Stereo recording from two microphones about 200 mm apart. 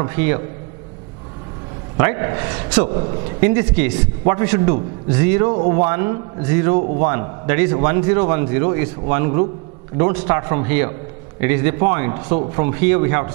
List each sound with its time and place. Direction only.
0.0 s a man's voice: 15° right (ahead or behind)
2.0 s a man's voice: 20° right (ahead or behind)
2.9 s a man's voice: 30° right (ahead or behind)
3.3 s a man's voice: 10° right (ahead or behind)
5.5 s speech: 30° right (ahead or behind)
5.8 s a man's voice: 15° right (ahead or behind)